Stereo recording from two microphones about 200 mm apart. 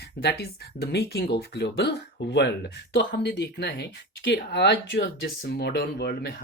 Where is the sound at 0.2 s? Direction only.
55° left (ahead or behind).